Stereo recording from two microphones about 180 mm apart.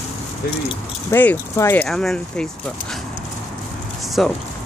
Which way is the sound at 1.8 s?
Centre (ahead or behind).